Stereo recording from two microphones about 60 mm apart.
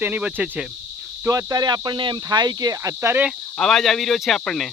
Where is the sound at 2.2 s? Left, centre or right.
Right.